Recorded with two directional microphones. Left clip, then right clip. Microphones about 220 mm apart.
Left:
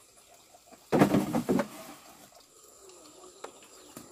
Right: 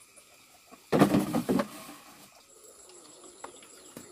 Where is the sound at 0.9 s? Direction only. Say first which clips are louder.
Even; centre (ahead or behind).